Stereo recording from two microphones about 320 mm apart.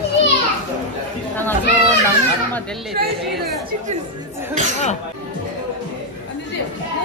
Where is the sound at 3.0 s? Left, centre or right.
Right.